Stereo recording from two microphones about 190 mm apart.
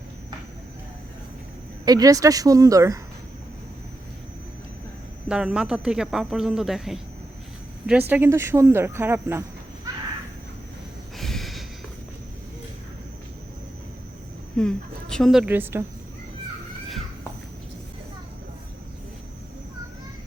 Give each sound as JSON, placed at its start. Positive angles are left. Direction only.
{"t": 1.8, "sound": "a woman's voice", "side_deg": -20}
{"t": 5.3, "sound": "speech", "side_deg": -5}
{"t": 8.1, "sound": "a woman's voice", "side_deg": -10}
{"t": 11.2, "sound": "a sound", "side_deg": 0}
{"t": 14.5, "sound": "a woman's voice", "side_deg": 5}